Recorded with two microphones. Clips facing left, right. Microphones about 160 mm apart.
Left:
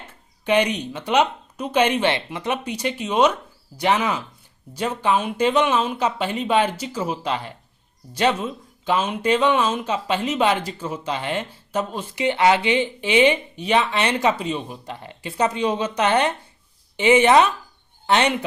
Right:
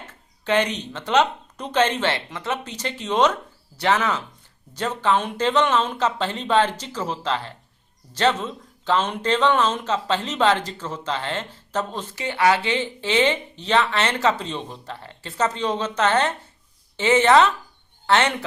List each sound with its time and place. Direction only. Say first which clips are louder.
0.1 s speech: left 2 dB; 15° left (ahead or behind)